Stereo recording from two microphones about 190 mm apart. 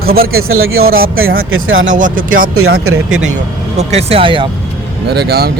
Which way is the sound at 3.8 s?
35° right (ahead or behind).